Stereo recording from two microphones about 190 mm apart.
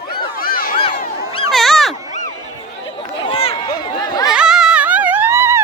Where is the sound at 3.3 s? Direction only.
30° left (ahead or behind).